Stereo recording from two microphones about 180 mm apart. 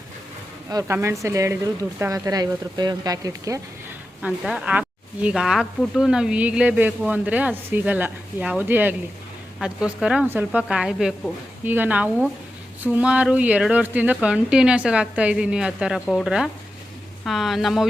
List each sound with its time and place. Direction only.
0.7 s speech: 20° right (ahead or behind)
4.2 s speech: 5° right (ahead or behind)